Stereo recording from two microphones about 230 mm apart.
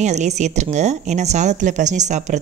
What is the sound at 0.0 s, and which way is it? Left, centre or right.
Speech, right.